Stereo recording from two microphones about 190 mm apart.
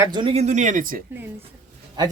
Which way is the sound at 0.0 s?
25° right (ahead or behind).